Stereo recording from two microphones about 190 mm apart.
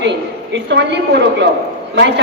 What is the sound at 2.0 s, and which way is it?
Speech, 65° right (ahead or behind).